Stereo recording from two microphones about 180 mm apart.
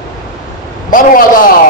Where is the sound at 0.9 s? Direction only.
50° left (ahead or behind).